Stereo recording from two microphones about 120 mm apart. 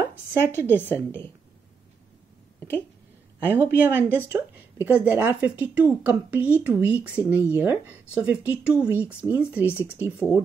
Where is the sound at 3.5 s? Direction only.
15° right (ahead or behind).